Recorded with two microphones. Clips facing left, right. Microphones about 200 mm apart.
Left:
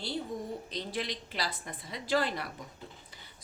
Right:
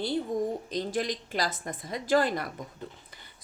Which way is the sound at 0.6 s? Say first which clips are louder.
Right 6 dB; 45° right (ahead or behind).